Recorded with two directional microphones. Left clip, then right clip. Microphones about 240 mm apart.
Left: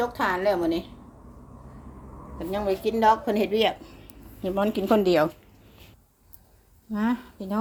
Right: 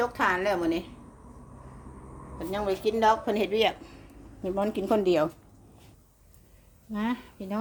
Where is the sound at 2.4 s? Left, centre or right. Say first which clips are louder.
Left 3 dB; centre.